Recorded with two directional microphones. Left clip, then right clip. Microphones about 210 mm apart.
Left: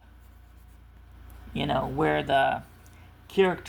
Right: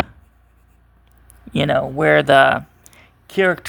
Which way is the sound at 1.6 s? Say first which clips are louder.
Right 9 dB; 50° right (ahead or behind).